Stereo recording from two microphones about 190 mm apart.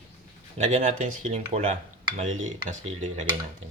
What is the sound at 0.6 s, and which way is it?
Speech, 35° right (ahead or behind).